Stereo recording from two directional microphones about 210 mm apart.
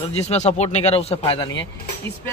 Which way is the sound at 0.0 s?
30° left (ahead or behind).